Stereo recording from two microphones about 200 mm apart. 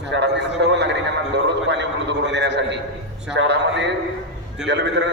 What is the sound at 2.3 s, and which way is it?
A man's voice, 60° right (ahead or behind).